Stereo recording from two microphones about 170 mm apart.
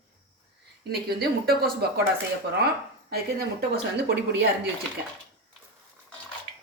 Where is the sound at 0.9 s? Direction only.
65° right (ahead or behind).